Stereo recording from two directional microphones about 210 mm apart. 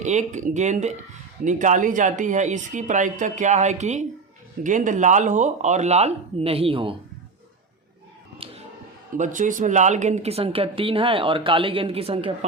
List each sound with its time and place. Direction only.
0.0 s a woman's voice: 35° right (ahead or behind)
8.4 s music: 25° right (ahead or behind)
9.1 s a woman's voice: 35° right (ahead or behind)